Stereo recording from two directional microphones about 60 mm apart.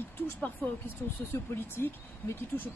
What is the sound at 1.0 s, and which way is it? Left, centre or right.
Speech, left.